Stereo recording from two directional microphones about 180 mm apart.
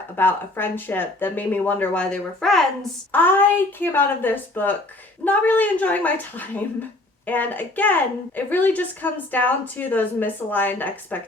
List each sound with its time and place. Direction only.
0.2 s a woman's voice: 10° left (ahead or behind)